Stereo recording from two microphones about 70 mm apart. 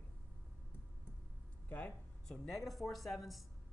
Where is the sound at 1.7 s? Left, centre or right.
Left.